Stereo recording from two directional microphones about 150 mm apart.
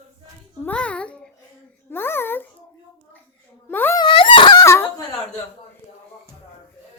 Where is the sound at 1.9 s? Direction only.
15° left (ahead or behind).